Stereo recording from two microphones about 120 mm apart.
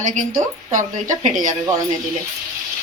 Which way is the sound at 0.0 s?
90° right.